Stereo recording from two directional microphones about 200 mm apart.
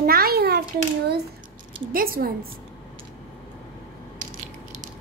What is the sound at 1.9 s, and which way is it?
Speech, 45° right (ahead or behind).